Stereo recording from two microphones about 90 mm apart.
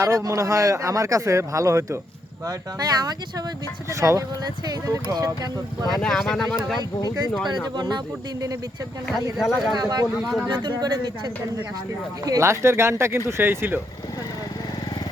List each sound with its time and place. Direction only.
0.0 s speech: 35° right (ahead or behind)
2.5 s speech: 45° right (ahead or behind)
3.8 s speech: 35° right (ahead or behind)
4.6 s speech: 45° right (ahead or behind)
6.0 s speech: 5° left (ahead or behind)
7.4 s speech: 55° right (ahead or behind)
9.4 s speech: centre (ahead or behind)
9.7 s speech: 50° right (ahead or behind)
10.2 s speech: centre (ahead or behind)
10.5 s speech: 60° right (ahead or behind)
12.2 s speech: 35° right (ahead or behind)